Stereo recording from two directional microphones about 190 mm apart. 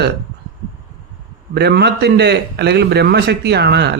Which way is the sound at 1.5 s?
60° right (ahead or behind).